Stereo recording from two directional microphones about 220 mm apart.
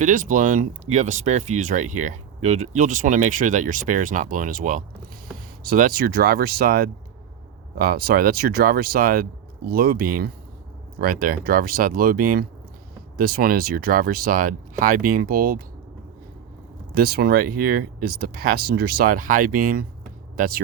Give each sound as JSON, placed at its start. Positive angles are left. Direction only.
{"t": 0.0, "sound": "speech", "side_deg": -35}
{"t": 16.9, "sound": "speech", "side_deg": -45}